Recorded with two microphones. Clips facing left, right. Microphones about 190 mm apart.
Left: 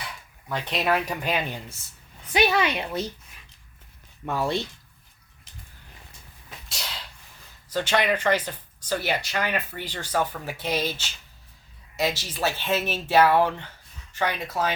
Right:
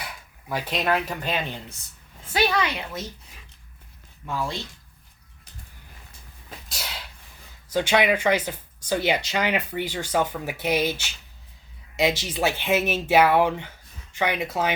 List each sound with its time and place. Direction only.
0.5 s speech: 5° right (ahead or behind)
0.8 s a woman's voice: 10° left (ahead or behind); by 3.1 s 30° left (ahead or behind)
4.3 s speech: 60° left (ahead or behind)
6.7 s a sound: 5° right (ahead or behind)
7.7 s speech: 10° right (ahead or behind)